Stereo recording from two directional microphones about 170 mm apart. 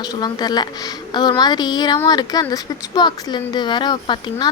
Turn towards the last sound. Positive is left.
turn(degrees=25)  # may be behind; listen again after turning